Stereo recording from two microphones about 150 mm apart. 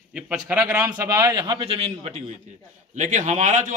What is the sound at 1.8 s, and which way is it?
Speech, 40° right (ahead or behind).